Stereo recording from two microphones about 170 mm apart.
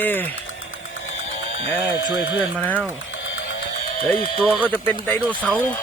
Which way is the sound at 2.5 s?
10° left (ahead or behind).